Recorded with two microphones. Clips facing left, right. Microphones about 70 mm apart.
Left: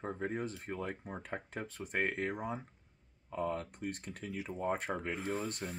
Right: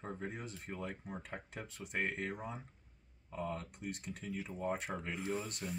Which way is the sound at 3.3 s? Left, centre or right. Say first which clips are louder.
Left 5 dB; left.